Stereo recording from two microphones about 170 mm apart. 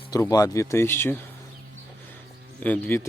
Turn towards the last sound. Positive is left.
turn(degrees=10)  # may be behind; listen again after turning